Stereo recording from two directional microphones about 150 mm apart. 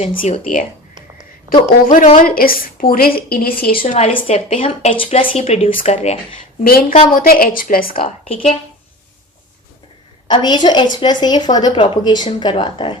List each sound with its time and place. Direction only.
1.5 s a woman's voice: 65° left (ahead or behind)
3.8 s a woman's voice: 45° left (ahead or behind)
6.7 s a woman's voice: 75° left (ahead or behind)
8.0 s a woman's voice: 40° left (ahead or behind)
10.2 s a woman's voice: 30° left (ahead or behind)